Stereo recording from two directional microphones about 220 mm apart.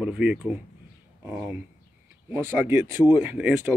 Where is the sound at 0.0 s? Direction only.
5° right (ahead or behind).